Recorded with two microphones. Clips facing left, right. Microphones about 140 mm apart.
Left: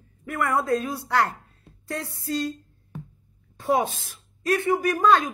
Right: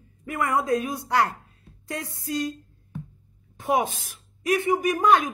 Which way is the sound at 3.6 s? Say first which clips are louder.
Left 1 dB; 15° right (ahead or behind).